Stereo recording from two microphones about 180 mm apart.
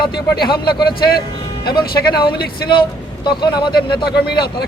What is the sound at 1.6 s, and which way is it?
Speech, 25° left (ahead or behind).